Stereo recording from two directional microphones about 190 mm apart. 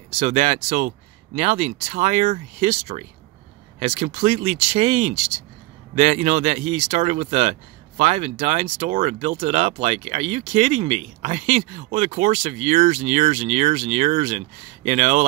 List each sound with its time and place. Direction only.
0.1 s speech: 35° right (ahead or behind)